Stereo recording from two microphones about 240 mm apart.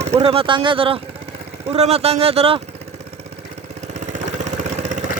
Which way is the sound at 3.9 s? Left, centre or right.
Right.